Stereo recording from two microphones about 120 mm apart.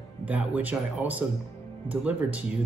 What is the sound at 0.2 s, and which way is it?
Speech, 15° right (ahead or behind).